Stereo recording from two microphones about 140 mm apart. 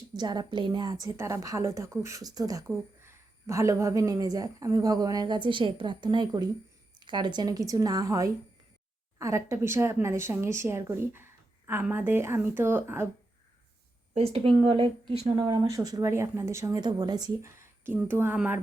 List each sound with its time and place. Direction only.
0.2 s a woman's voice: 30° right (ahead or behind)
14.1 s a woman's voice: 45° right (ahead or behind)
15.4 s a woman's voice: 30° right (ahead or behind); by 18.6 s 10° right (ahead or behind)